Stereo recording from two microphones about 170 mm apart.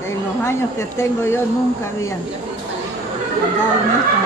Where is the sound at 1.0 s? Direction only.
15° left (ahead or behind).